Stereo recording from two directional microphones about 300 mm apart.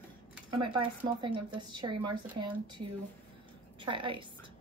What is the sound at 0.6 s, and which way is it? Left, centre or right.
A woman's voice, centre.